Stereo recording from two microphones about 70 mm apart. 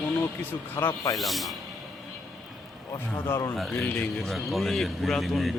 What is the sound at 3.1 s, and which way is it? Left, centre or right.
Speech, left.